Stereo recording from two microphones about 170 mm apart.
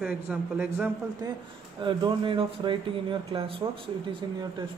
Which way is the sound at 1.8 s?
30° right (ahead or behind).